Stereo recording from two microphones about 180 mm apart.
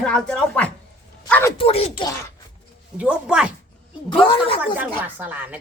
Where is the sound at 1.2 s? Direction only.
10° left (ahead or behind).